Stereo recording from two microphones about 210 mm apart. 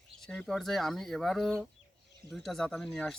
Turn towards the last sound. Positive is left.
turn(degrees=5)  # may be behind; listen again after turning